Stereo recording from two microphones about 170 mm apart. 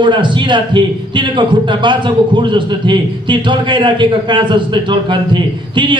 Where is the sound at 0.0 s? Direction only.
25° right (ahead or behind).